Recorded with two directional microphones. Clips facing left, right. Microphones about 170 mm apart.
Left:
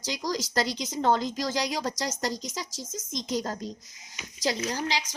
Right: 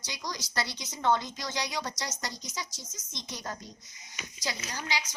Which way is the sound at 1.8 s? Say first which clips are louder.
Left 6 dB; 40° left (ahead or behind).